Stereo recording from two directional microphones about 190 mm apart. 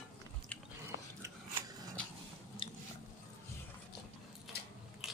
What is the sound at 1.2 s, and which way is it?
Scissors, 15° right (ahead or behind).